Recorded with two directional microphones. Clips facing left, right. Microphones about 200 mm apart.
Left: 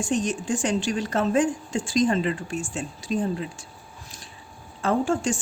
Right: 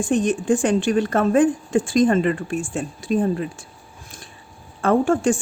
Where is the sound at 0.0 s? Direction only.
55° right (ahead or behind).